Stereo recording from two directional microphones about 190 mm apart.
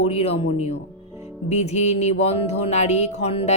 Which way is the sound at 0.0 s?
30° left (ahead or behind).